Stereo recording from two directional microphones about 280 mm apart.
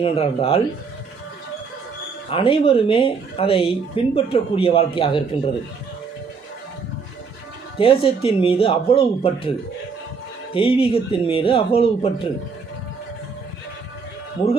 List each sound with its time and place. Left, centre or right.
0.0 s speech: left
2.3 s speech: centre
7.8 s speech: centre
10.5 s speech: centre